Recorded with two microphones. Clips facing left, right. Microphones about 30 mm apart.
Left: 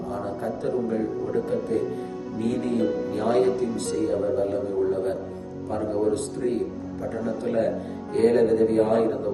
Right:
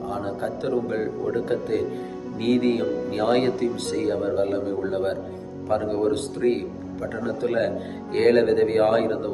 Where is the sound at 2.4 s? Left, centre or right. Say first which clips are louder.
Right 5 dB; right.